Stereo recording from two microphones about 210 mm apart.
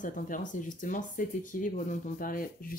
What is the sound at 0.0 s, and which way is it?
Speech, 40° left (ahead or behind).